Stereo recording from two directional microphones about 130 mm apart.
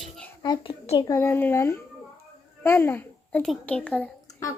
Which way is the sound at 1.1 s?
20° left (ahead or behind).